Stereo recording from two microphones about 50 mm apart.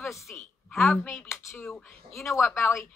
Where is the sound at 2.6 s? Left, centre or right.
Left.